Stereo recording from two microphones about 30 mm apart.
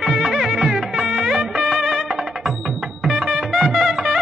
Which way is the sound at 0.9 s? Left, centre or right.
Centre.